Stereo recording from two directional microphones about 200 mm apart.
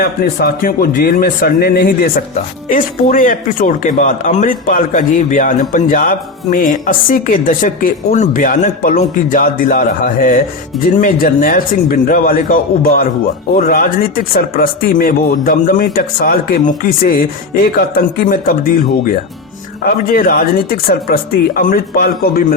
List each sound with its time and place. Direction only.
0.0 s a man's voice: 50° left (ahead or behind)
19.8 s a man's voice: 45° left (ahead or behind)